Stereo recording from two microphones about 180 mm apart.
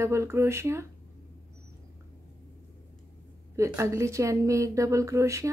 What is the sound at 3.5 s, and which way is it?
Speech, 15° right (ahead or behind).